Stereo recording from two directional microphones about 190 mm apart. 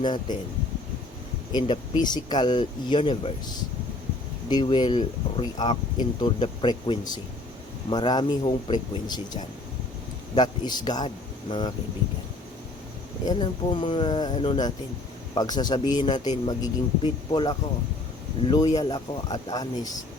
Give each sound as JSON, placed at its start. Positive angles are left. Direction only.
{"t": 0.0, "sound": "speech", "side_deg": 25}
{"t": 1.5, "sound": "speech", "side_deg": 25}
{"t": 4.4, "sound": "speech", "side_deg": 25}
{"t": 13.2, "sound": "speech", "side_deg": 25}